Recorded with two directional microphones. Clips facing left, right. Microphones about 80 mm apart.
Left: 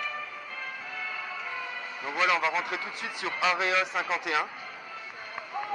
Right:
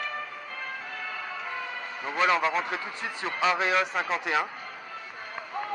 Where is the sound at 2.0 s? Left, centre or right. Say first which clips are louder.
Right 2 dB; right.